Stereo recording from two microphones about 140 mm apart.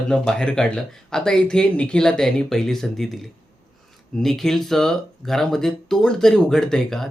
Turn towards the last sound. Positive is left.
turn(degrees=5)  # may be behind; listen again after turning